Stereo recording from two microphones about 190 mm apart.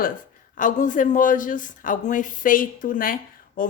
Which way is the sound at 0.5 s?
45° left (ahead or behind).